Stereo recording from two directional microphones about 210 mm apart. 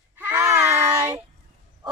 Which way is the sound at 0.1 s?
10° right (ahead or behind).